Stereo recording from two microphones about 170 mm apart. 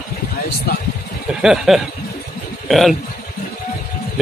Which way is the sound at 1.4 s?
5° right (ahead or behind).